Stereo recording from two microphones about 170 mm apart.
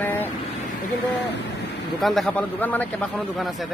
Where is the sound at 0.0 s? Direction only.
10° left (ahead or behind).